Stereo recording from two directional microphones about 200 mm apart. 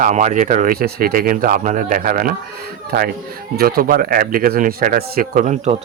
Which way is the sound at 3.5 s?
50° right (ahead or behind).